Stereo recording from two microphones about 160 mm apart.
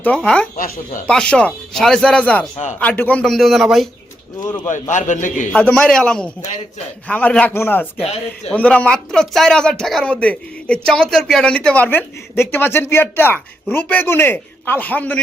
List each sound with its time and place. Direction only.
0.0 s speech: 5° left (ahead or behind)
0.5 s speech: 60° left (ahead or behind)
1.0 s a man's voice: 5° left (ahead or behind)
4.4 s speech: 20° left (ahead or behind)
4.7 s a man's voice: 50° left (ahead or behind)
5.5 s a man's voice: 10° left (ahead or behind)